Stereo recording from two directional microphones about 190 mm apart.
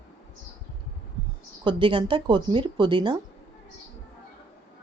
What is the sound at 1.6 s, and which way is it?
Speech, 25° right (ahead or behind).